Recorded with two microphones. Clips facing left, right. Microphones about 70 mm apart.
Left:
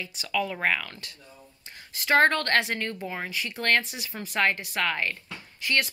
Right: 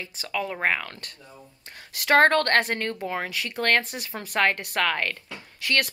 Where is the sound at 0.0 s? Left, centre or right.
Right.